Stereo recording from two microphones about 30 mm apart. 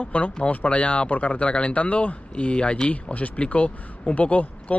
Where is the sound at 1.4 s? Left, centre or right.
Left.